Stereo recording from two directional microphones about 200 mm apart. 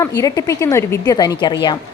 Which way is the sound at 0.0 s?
15° left (ahead or behind).